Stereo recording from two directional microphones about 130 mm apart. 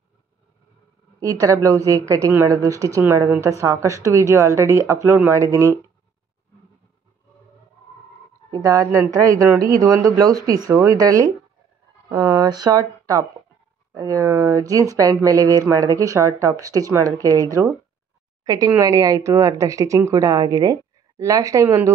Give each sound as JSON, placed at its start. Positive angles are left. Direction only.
{"t": 1.2, "sound": "a woman's voice", "side_deg": -25}
{"t": 8.5, "sound": "a woman's voice", "side_deg": -30}
{"t": 12.1, "sound": "a woman's voice", "side_deg": -20}